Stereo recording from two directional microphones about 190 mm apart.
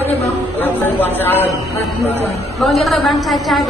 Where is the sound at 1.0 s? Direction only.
10° left (ahead or behind).